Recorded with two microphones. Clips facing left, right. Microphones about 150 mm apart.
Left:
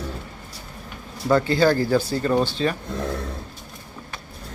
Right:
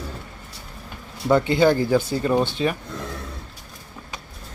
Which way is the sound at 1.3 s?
20° right (ahead or behind).